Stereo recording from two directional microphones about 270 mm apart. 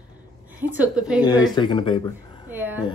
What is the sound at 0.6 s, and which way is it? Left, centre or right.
Speech, centre.